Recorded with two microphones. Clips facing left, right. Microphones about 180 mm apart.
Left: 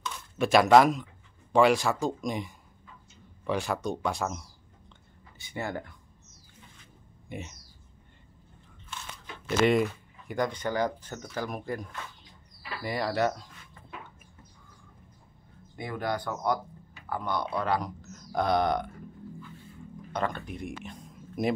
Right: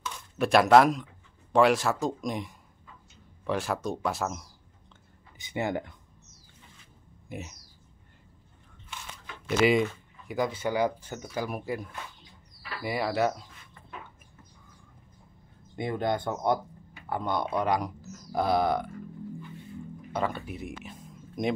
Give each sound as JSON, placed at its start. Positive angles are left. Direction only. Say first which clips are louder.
{"t": 0.0, "sound": "speech", "louder": "even", "side_deg": 0}
{"t": 5.4, "sound": "speech", "louder": "right 4 dB", "side_deg": -20}
{"t": 7.2, "sound": "speech", "louder": "even", "side_deg": 0}
{"t": 9.6, "sound": "speech", "louder": "even", "side_deg": 0}
{"t": 15.7, "sound": "speech", "louder": "right 3 dB", "side_deg": -20}
{"t": 20.1, "sound": "speech", "louder": "right 1 dB", "side_deg": -5}